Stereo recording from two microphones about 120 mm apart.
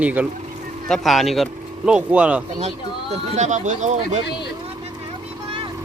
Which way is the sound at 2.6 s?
65° right (ahead or behind).